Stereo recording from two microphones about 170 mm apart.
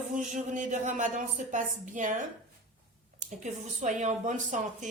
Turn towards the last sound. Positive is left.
turn(degrees=-45)  # may be behind; listen again after turning